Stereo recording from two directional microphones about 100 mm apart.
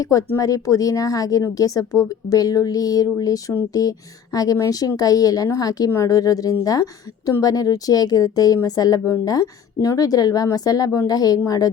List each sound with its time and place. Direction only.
0.0 s speech: 35° left (ahead or behind)